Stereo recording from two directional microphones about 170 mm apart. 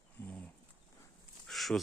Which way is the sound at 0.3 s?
10° left (ahead or behind).